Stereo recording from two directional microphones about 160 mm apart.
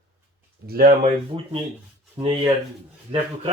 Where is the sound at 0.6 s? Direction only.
65° right (ahead or behind).